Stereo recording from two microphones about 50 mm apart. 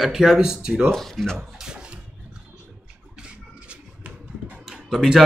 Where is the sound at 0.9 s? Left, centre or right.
Centre.